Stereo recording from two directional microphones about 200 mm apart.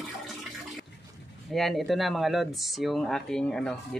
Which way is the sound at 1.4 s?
Centre (ahead or behind).